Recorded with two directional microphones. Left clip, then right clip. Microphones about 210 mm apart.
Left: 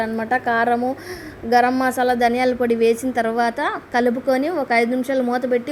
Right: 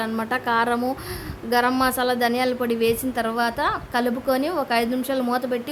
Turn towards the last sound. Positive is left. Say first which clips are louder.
# left 4 dB
turn(degrees=5)  # may be behind; listen again after turning